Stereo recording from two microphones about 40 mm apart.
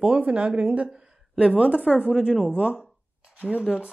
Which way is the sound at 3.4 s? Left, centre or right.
Right.